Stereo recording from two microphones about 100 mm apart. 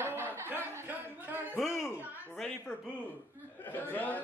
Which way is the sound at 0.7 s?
20° right (ahead or behind).